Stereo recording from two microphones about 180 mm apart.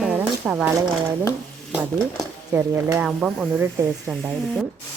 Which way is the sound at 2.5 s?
10° right (ahead or behind).